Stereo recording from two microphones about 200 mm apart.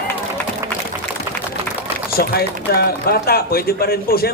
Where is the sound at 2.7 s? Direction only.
50° left (ahead or behind).